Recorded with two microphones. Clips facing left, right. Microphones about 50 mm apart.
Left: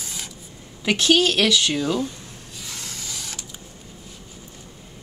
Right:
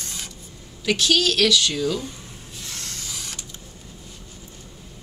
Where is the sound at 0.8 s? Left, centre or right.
Left.